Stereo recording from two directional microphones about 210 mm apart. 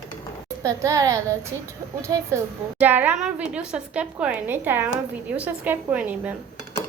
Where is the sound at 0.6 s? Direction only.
15° right (ahead or behind).